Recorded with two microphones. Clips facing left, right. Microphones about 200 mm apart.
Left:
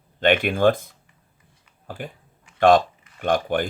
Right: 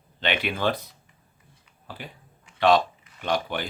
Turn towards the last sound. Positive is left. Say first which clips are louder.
# left 6 dB
turn(degrees=50)  # may be behind; listen again after turning